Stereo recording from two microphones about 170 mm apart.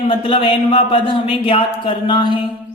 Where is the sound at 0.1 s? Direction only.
30° left (ahead or behind).